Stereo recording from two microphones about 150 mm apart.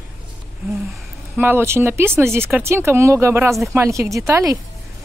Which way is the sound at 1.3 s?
15° right (ahead or behind).